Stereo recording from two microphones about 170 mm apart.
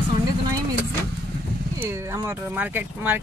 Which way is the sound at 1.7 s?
15° right (ahead or behind).